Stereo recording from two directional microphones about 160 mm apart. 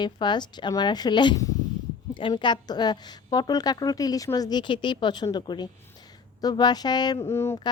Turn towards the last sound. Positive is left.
turn(degrees=20)  # may be behind; listen again after turning